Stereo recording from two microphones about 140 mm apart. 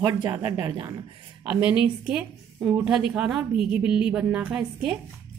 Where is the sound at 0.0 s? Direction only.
30° right (ahead or behind).